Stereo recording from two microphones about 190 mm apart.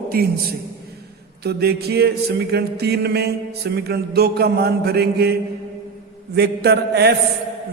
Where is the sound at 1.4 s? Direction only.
60° right (ahead or behind).